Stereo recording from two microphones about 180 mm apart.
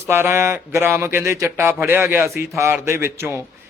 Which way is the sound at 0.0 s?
15° right (ahead or behind).